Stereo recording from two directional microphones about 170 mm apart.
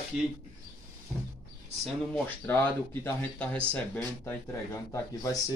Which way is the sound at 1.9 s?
10° left (ahead or behind).